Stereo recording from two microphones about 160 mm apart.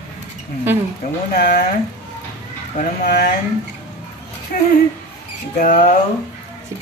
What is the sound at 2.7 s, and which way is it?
Speech, 55° left (ahead or behind).